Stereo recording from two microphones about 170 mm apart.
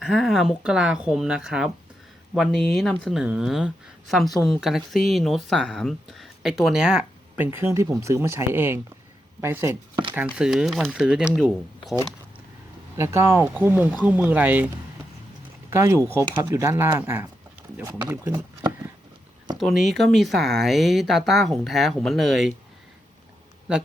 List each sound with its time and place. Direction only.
0.0 s speech: centre (ahead or behind)
13.0 s speech: 15° right (ahead or behind)
15.7 s speech: 15° right (ahead or behind)
18.3 s speech: 25° right (ahead or behind)
19.5 s speech: centre (ahead or behind)